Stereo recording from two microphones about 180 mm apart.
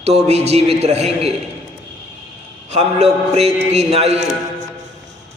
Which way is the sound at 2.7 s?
35° right (ahead or behind).